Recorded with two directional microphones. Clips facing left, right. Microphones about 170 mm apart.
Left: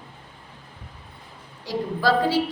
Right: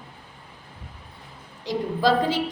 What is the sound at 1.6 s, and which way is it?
Speech, 20° right (ahead or behind).